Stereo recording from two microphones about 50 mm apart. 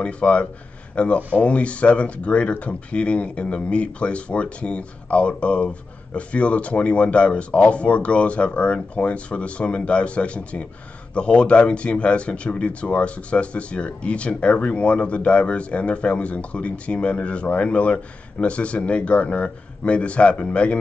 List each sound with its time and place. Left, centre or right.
0.0 s speech: left